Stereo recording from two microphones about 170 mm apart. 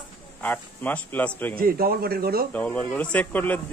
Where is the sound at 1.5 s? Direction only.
60° right (ahead or behind).